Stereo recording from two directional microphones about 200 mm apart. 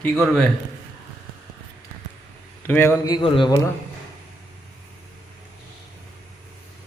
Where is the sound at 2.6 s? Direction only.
10° left (ahead or behind).